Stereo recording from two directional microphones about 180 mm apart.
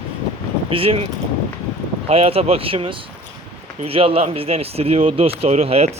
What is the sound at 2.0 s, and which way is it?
Speech, 35° right (ahead or behind).